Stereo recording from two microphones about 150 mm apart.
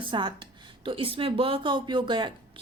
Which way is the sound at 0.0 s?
35° right (ahead or behind).